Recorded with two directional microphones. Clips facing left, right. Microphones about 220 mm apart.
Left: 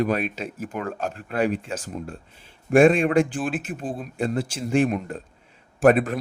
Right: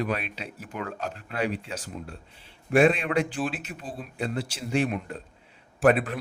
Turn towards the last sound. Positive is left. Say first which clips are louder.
# left 4 dB
turn(degrees=45)  # may be behind; listen again after turning